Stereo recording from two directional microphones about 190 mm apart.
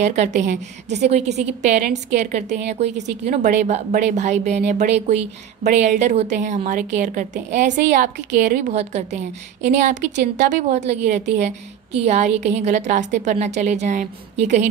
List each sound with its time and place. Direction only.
0.0 s a woman's voice: 40° right (ahead or behind)